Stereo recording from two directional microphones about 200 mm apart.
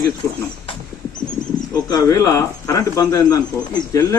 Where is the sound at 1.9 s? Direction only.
20° left (ahead or behind).